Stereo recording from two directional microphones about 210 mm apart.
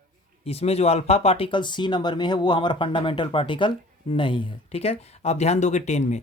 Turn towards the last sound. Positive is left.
turn(degrees=35)  # may be behind; listen again after turning